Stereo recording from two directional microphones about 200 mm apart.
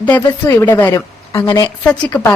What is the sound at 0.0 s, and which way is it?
A woman's voice, 10° left (ahead or behind).